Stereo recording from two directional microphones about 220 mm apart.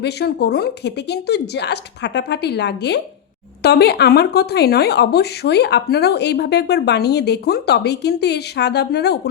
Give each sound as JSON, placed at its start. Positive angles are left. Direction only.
{"t": 0.0, "sound": "speech", "side_deg": 50}